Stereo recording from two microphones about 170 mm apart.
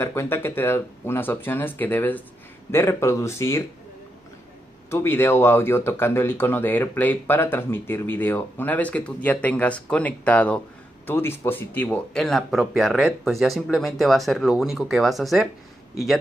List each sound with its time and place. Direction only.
0.0 s speech: 15° left (ahead or behind)
4.8 s speech: 15° left (ahead or behind)